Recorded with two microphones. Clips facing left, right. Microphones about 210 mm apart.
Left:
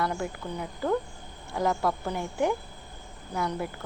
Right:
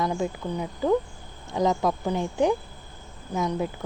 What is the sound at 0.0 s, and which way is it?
Speech, 20° right (ahead or behind).